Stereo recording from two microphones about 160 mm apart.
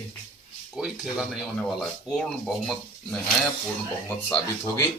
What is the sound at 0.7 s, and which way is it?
Speech, centre (ahead or behind).